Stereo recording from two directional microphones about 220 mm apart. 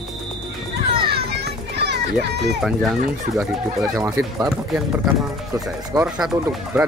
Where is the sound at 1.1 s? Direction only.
45° right (ahead or behind).